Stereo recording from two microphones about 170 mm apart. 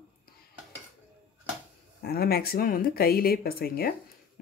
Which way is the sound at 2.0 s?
65° left (ahead or behind).